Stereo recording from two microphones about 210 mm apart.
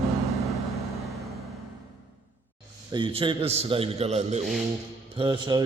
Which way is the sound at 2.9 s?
20° right (ahead or behind).